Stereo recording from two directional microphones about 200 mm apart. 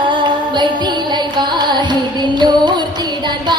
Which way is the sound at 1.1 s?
20° right (ahead or behind).